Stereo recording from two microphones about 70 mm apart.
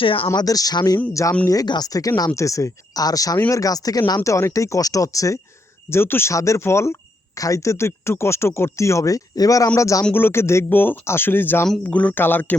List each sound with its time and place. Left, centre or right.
0.3 s speech: left
1.2 s speech: left
1.6 s speech: left
2.3 s speech: left
5.9 s speech: left
6.3 s speech: left
7.3 s speech: left
9.7 s speech: left
10.2 s speech: left
10.7 s speech: left
11.8 s speech: centre